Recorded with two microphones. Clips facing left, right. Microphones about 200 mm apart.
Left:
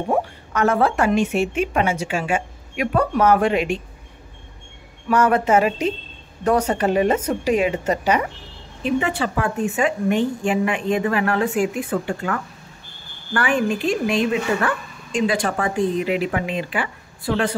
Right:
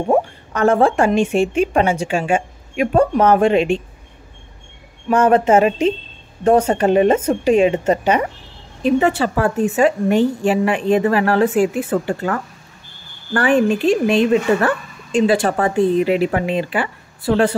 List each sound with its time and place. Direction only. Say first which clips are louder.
0.1 s speech: right 5 dB; 35° right (ahead or behind)
5.1 s speech: right 4 dB; 25° right (ahead or behind)
9.2 s a woman's voice: right 5 dB; 40° right (ahead or behind)